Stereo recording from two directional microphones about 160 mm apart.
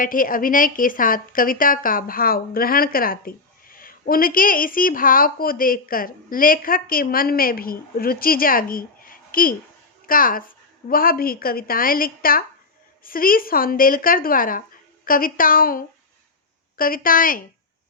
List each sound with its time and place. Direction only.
0.0 s a woman's voice: 60° left (ahead or behind)